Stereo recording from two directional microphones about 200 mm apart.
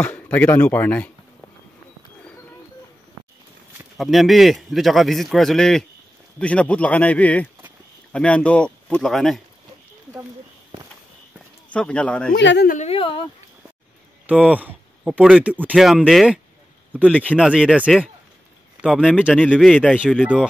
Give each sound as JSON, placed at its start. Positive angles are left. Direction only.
{"t": 0.0, "sound": "speech", "side_deg": 5}
{"t": 4.0, "sound": "speech", "side_deg": 0}
{"t": 11.7, "sound": "speech", "side_deg": 5}
{"t": 12.4, "sound": "speech", "side_deg": 60}
{"t": 12.6, "sound": "a woman's voice", "side_deg": 35}
{"t": 14.2, "sound": "speech", "side_deg": -5}
{"t": 17.5, "sound": "speech", "side_deg": -5}